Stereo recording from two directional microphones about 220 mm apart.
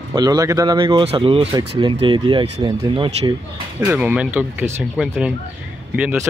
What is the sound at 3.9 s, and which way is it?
Speech, 5° right (ahead or behind).